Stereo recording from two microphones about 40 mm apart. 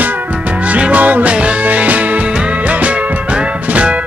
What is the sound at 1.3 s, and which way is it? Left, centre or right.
Music, right.